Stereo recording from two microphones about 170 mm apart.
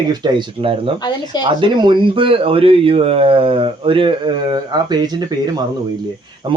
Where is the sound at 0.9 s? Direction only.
25° left (ahead or behind).